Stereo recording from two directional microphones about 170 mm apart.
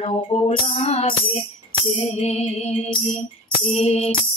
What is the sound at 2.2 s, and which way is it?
Music, 40° left (ahead or behind).